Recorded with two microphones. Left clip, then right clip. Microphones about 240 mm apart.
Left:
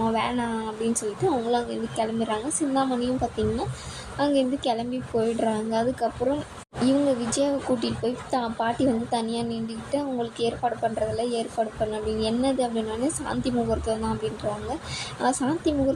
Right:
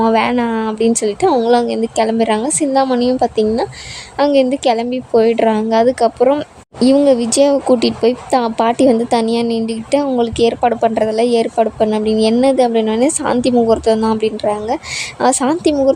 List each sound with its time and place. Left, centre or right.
0.0 s speech: right
15.2 s speech: right